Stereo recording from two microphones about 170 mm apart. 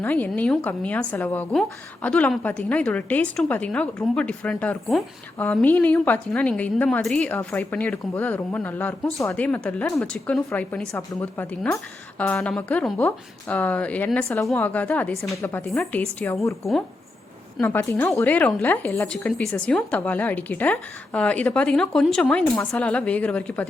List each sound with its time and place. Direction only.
0.0 s a woman's voice: 10° left (ahead or behind)
17.6 s a woman's voice: 15° left (ahead or behind)